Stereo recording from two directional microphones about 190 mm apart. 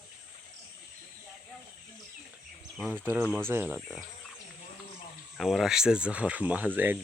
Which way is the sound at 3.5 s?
10° right (ahead or behind).